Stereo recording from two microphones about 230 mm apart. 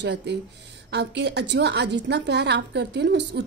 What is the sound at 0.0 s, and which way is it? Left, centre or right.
A woman's voice, right.